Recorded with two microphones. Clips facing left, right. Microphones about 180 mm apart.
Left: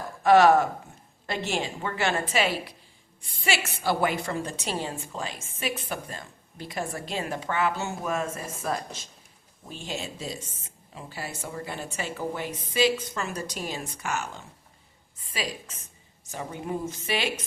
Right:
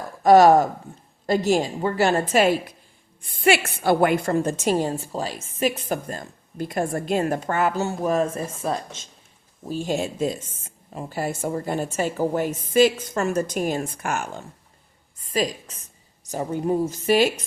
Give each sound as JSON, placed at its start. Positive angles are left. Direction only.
{"t": 0.2, "sound": "a woman's voice", "side_deg": -40}
{"t": 9.6, "sound": "a woman's voice", "side_deg": -45}
{"t": 15.2, "sound": "a woman's voice", "side_deg": -40}